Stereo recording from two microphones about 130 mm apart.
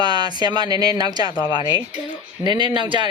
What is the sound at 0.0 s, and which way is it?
Speech, 35° right (ahead or behind).